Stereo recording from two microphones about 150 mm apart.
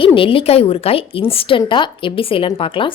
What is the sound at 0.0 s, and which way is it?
A woman's voice, 35° left (ahead or behind).